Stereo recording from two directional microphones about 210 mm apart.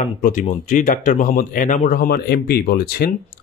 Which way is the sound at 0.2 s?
40° left (ahead or behind).